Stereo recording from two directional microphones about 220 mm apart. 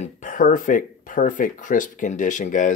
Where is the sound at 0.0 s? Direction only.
35° left (ahead or behind).